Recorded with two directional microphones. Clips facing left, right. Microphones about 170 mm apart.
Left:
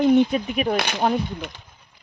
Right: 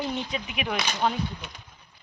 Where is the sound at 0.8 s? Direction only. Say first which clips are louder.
Left 5 dB; 55° left (ahead or behind).